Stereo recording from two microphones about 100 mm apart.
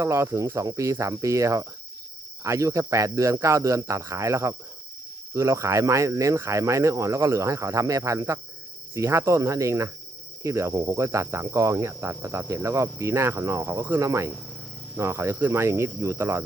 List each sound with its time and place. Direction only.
0.0 s speech: 30° right (ahead or behind)
10.4 s cricket: 30° right (ahead or behind)